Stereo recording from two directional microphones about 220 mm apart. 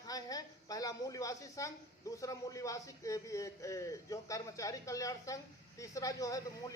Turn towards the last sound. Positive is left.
turn(degrees=15)  # may be behind; listen again after turning